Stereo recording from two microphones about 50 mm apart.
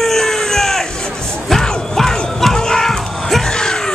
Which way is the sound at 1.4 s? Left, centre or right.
Centre.